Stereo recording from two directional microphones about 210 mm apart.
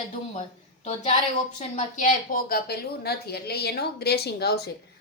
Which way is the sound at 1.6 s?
35° left (ahead or behind).